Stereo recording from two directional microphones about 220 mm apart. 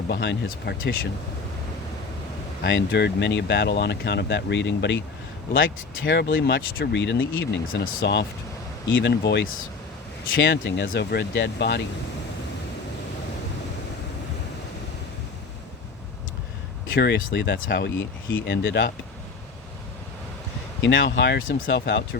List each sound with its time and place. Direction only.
0.1 s speech: 50° left (ahead or behind)
2.6 s speech: 50° left (ahead or behind)
16.9 s speech: 50° left (ahead or behind)
20.8 s speech: 55° left (ahead or behind)